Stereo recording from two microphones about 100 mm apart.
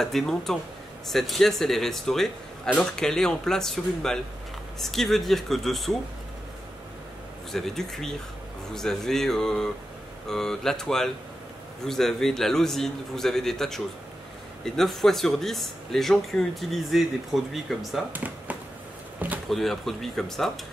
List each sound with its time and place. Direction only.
0.0 s a man's voice: 5° left (ahead or behind)
7.5 s a man's voice: 5° left (ahead or behind)
18.1 s speech: 15° right (ahead or behind)
19.1 s a sound: 15° right (ahead or behind)
19.5 s a man's voice: centre (ahead or behind)